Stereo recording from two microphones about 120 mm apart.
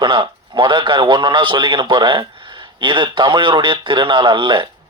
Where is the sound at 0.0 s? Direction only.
45° right (ahead or behind).